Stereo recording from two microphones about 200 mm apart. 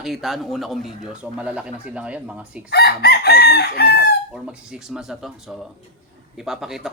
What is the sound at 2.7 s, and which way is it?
Chicken, 55° left (ahead or behind).